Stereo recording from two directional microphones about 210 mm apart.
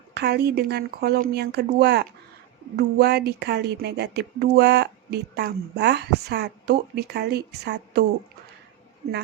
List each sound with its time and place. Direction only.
0.1 s speech: 50° right (ahead or behind)